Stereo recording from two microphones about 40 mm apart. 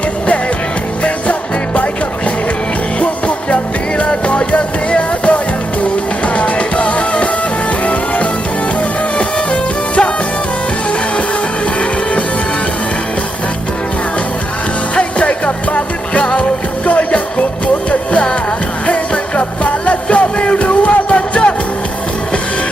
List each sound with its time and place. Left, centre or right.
1.0 s music: left
3.0 s music: left
9.1 s music: left
14.9 s music: left
18.9 s music: left